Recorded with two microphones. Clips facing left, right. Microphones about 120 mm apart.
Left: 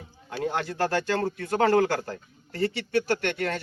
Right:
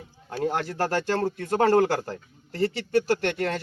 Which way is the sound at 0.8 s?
30° right (ahead or behind).